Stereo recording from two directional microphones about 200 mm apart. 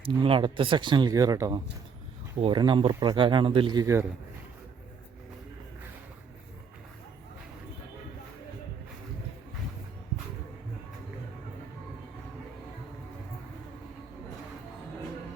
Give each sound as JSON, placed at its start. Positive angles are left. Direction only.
{"t": 0.0, "sound": "speech", "side_deg": -25}